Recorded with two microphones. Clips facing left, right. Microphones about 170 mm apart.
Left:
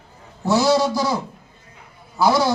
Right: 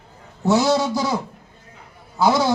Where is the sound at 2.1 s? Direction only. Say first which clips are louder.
Even; 20° right (ahead or behind).